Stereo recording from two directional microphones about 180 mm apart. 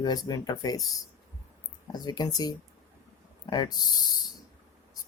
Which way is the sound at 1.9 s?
20° left (ahead or behind).